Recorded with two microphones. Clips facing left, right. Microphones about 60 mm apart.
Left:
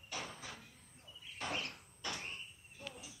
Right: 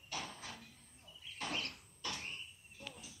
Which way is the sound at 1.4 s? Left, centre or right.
Left.